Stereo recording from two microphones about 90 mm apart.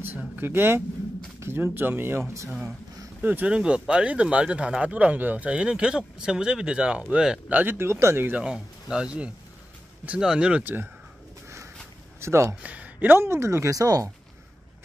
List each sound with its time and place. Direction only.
0.4 s speech: 25° right (ahead or behind)
3.2 s speech: 20° right (ahead or behind)
8.3 s speech: 10° right (ahead or behind)
10.6 s speech: 20° right (ahead or behind)
12.2 s speech: 30° right (ahead or behind)
12.6 s a sound: 15° right (ahead or behind)
13.2 s speech: 30° right (ahead or behind)